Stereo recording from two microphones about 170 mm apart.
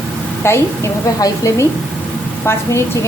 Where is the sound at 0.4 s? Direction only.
15° left (ahead or behind).